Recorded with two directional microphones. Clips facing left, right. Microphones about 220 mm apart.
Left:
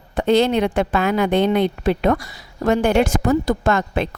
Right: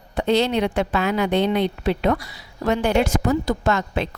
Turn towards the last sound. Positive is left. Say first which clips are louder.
# left 3 dB
turn(degrees=50)  # may be behind; listen again after turning